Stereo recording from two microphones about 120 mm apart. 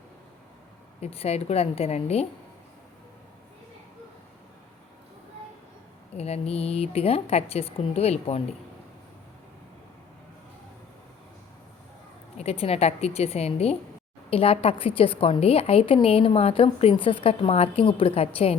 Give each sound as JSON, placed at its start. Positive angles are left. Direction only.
{"t": 1.0, "sound": "a woman's voice", "side_deg": 60}
{"t": 6.1, "sound": "a woman's voice", "side_deg": 60}
{"t": 12.4, "sound": "a woman's voice", "side_deg": 60}